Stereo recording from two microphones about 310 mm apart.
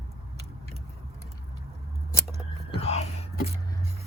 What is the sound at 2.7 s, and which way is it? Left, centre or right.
Whispering, centre.